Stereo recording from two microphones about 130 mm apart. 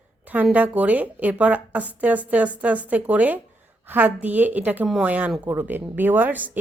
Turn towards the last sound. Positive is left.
turn(degrees=-15)  # may be behind; listen again after turning